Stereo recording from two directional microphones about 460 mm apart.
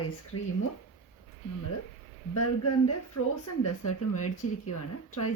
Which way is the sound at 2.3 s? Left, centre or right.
Left.